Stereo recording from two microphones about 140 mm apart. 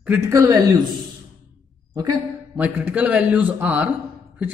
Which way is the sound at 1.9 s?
25° right (ahead or behind).